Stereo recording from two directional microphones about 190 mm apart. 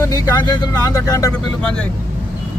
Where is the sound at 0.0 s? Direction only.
20° left (ahead or behind).